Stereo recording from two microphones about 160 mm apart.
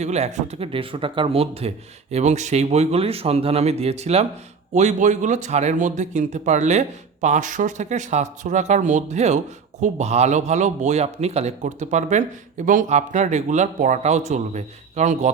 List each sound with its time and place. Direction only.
0.0 s a man's voice: 45° right (ahead or behind)